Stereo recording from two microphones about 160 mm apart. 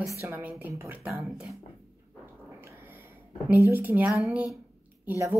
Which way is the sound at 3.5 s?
10° right (ahead or behind).